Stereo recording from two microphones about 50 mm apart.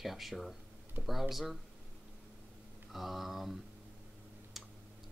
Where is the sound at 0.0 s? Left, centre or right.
Centre.